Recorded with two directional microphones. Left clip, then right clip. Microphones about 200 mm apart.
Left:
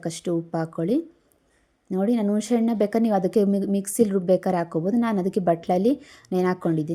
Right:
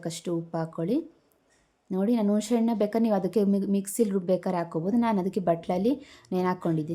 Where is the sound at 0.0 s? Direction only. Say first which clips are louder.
Left 5 dB; 15° left (ahead or behind).